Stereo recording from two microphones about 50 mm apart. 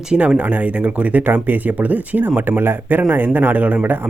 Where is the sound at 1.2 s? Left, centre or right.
Right.